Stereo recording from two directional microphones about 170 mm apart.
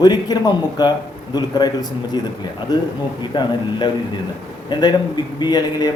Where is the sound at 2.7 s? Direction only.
25° left (ahead or behind).